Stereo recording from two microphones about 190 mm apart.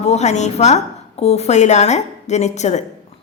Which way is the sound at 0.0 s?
35° left (ahead or behind).